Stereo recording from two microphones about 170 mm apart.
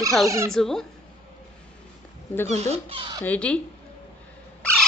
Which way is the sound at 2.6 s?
35° right (ahead or behind).